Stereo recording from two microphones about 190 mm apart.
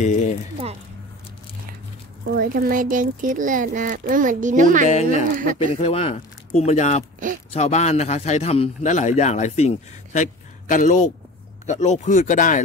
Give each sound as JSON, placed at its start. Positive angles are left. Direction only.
{"t": 0.0, "sound": "a sound", "side_deg": 40}
{"t": 2.3, "sound": "speech", "side_deg": -50}
{"t": 4.8, "sound": "a man's voice", "side_deg": 40}